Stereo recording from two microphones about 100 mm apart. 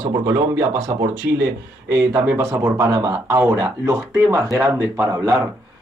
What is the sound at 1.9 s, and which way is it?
Speech, 35° right (ahead or behind).